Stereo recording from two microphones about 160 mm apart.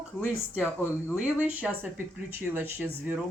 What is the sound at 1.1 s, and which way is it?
Speech, 10° right (ahead or behind).